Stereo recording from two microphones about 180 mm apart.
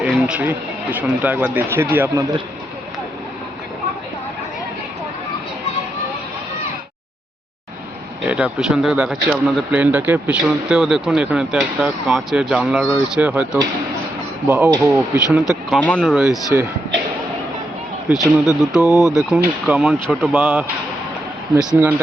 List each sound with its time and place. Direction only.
0.0 s speech: 5° right (ahead or behind)
8.2 s a man's voice: 5° right (ahead or behind)
15.8 s a man's voice: 5° left (ahead or behind)
18.1 s a man's voice: centre (ahead or behind)
18.8 s speech: 15° left (ahead or behind)
19.1 s a man's voice: centre (ahead or behind)
20.3 s speech: 10° right (ahead or behind)